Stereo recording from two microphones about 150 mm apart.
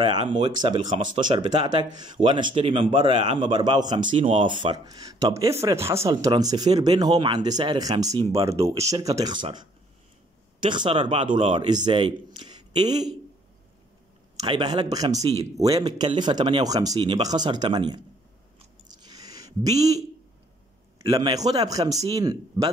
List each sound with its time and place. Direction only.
0.0 s a man's voice: 30° right (ahead or behind)
11.0 s speech: 50° right (ahead or behind)
11.3 s a man's voice: 35° right (ahead or behind)
14.4 s a man's voice: 30° right (ahead or behind)
18.9 s a sound: 25° right (ahead or behind)
21.0 s a man's voice: 30° right (ahead or behind)